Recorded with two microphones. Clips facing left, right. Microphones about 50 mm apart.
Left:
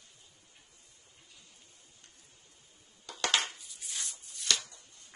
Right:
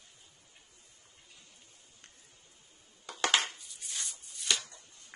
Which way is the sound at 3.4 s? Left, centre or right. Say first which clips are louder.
Even; centre.